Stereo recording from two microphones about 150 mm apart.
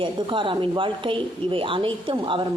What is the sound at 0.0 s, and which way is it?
Speech, 35° right (ahead or behind).